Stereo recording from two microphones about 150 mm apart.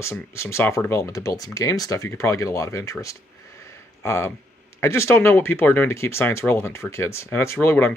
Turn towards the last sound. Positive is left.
turn(degrees=15)  # may be behind; listen again after turning